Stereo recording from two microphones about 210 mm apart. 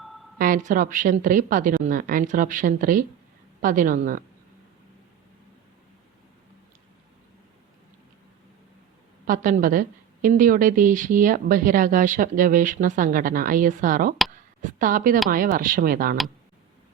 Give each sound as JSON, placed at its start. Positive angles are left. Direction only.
{"t": 0.3, "sound": "a woman's voice", "side_deg": -40}
{"t": 9.2, "sound": "a woman's voice", "side_deg": -40}